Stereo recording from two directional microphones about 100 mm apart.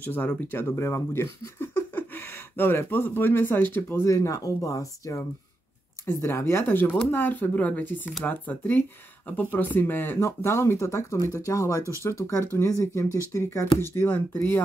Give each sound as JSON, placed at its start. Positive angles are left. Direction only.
{"t": 0.0, "sound": "speech", "side_deg": 20}